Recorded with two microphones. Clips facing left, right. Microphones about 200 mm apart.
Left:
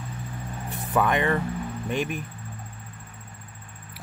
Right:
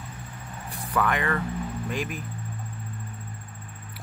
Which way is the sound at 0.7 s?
25° left (ahead or behind).